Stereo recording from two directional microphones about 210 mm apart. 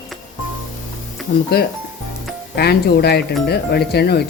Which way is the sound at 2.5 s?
50° left (ahead or behind).